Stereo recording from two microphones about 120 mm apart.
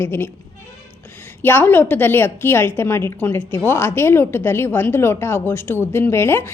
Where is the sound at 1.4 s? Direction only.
15° left (ahead or behind).